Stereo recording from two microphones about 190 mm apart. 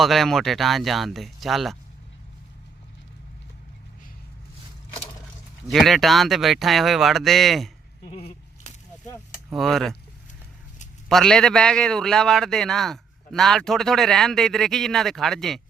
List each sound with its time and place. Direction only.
0.0 s a man's voice: centre (ahead or behind)
5.6 s a man's voice: centre (ahead or behind)
8.0 s a sound: 30° left (ahead or behind)
9.5 s a man's voice: centre (ahead or behind)
11.1 s a man's voice: centre (ahead or behind)